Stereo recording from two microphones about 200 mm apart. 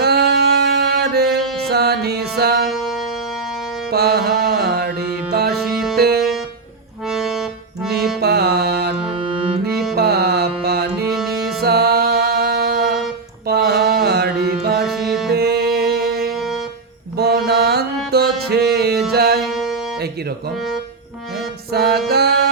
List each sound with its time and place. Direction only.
0.0 s music: 50° right (ahead or behind)
2.6 s music: centre (ahead or behind)
3.9 s music: 50° right (ahead or behind)
5.6 s music: centre (ahead or behind)
6.0 s music: 50° right (ahead or behind)
7.1 s accordion: centre (ahead or behind)
8.2 s music: 55° right (ahead or behind)
11.1 s music: centre (ahead or behind)
11.6 s music: 50° right (ahead or behind)
13.5 s mantra: 55° right (ahead or behind)
14.8 s music: centre (ahead or behind)
15.3 s music: 50° right (ahead or behind)
19.4 s music: centre (ahead or behind)
21.7 s music: 50° right (ahead or behind)